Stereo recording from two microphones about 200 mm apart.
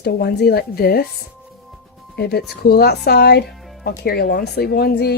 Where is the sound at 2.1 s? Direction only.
50° left (ahead or behind).